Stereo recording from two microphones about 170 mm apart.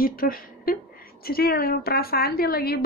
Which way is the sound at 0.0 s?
60° left (ahead or behind).